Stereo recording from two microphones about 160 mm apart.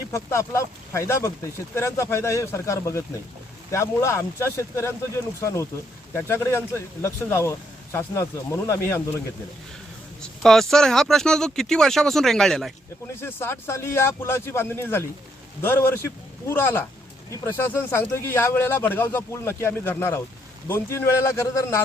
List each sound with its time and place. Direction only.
0.1 s speech: 20° left (ahead or behind)
10.4 s speech: centre (ahead or behind)
13.2 s speech: 15° left (ahead or behind)